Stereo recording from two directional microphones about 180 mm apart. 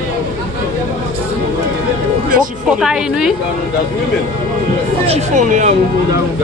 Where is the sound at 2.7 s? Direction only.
5° right (ahead or behind).